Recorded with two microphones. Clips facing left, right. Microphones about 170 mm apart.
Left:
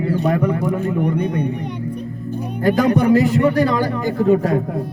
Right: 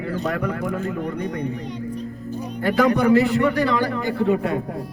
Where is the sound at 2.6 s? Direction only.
40° left (ahead or behind).